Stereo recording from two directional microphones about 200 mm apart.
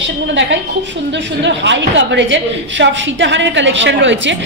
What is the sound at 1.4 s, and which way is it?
Speech, 65° right (ahead or behind).